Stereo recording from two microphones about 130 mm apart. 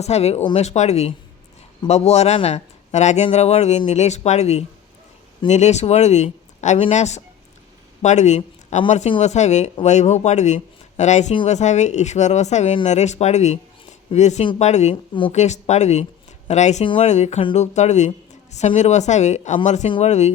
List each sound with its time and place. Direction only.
0.0 s speech: 55° left (ahead or behind)
16.8 s speech: 40° left (ahead or behind)
17.1 s speech: 60° left (ahead or behind)